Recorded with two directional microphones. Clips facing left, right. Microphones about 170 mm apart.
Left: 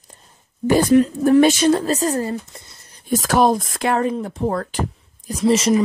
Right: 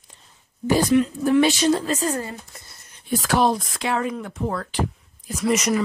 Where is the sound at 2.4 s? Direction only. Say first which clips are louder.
Left 3 dB; 20° left (ahead or behind).